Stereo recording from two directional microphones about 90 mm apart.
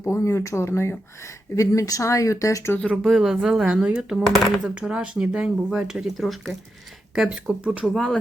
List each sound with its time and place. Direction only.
0.0 s speech: 30° left (ahead or behind)
2.9 s speech: centre (ahead or behind)
7.9 s speech: centre (ahead or behind)